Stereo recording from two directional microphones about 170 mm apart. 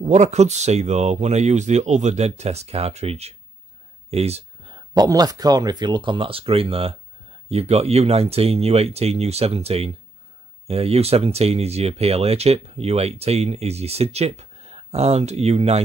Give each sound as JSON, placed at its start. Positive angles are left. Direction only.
{"t": 0.0, "sound": "speech", "side_deg": -40}
{"t": 4.1, "sound": "a sound", "side_deg": -40}
{"t": 4.7, "sound": "speech", "side_deg": -20}